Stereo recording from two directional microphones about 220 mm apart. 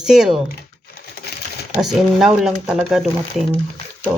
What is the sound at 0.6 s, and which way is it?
Computer keyboard, 45° left (ahead or behind).